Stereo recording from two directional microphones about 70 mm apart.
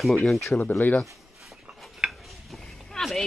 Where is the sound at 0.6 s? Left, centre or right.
Left.